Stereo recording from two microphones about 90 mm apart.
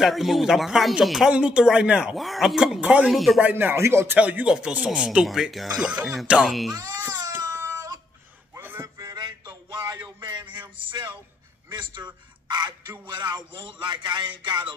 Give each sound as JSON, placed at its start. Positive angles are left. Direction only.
{"t": 0.0, "sound": "speech", "side_deg": 0}
{"t": 3.1, "sound": "speech", "side_deg": 0}
{"t": 3.4, "sound": "speech", "side_deg": -20}
{"t": 4.2, "sound": "speech", "side_deg": -15}
{"t": 5.8, "sound": "speech", "side_deg": -10}
{"t": 7.6, "sound": "a sound", "side_deg": -35}
{"t": 8.5, "sound": "a sound", "side_deg": -25}
{"t": 8.8, "sound": "music", "side_deg": -40}
{"t": 10.8, "sound": "speech", "side_deg": -65}